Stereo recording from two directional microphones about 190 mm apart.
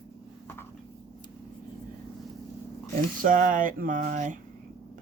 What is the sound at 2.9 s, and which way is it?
Speech, 45° right (ahead or behind).